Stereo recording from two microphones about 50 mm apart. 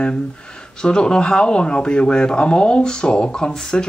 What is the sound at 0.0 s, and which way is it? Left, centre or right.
Speech, centre.